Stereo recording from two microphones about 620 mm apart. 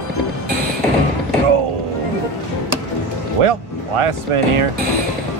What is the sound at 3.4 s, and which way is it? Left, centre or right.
Speech, right.